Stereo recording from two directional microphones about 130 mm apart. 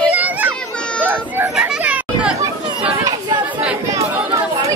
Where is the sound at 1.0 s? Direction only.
15° right (ahead or behind).